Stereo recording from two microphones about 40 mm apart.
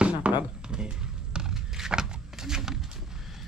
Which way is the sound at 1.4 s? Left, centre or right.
Centre.